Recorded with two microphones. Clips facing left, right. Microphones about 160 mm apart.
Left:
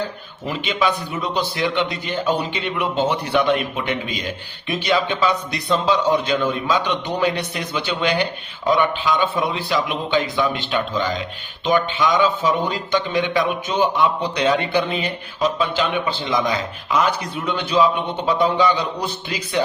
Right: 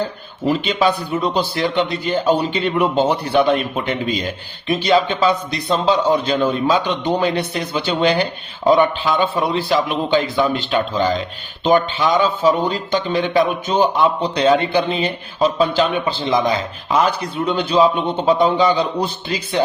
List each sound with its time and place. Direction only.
0.4 s a man's voice: 35° right (ahead or behind)